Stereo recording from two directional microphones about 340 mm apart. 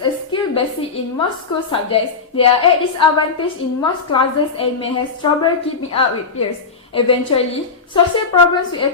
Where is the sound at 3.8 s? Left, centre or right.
Centre.